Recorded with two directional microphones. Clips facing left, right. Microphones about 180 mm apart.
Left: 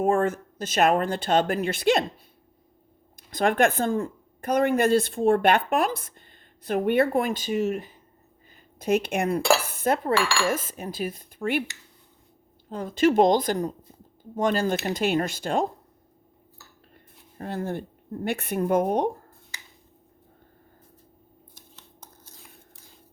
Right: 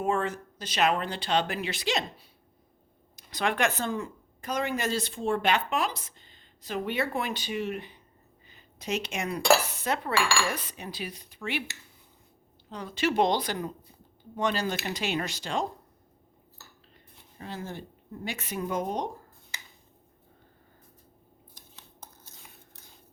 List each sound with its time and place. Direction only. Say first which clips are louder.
0.0 s speech: left 6 dB; 50° left (ahead or behind)
3.3 s speech: left 6 dB; 50° left (ahead or behind)
8.4 s a sound: left 9 dB; 50° left (ahead or behind)
9.6 s speech: left 7 dB; 50° left (ahead or behind)
12.7 s speech: left 7 dB; 50° left (ahead or behind)
16.9 s speech: left 3 dB; 55° left (ahead or behind)
21.8 s a sound: right 2 dB; 5° right (ahead or behind)